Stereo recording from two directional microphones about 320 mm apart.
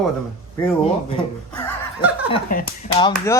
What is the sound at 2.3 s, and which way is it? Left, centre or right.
Speech, left.